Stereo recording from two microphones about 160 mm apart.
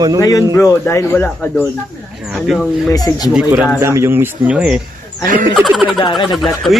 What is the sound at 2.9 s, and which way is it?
Speech, 25° left (ahead or behind).